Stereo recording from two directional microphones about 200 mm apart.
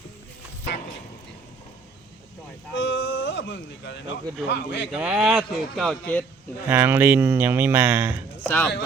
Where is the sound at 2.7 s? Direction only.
65° left (ahead or behind).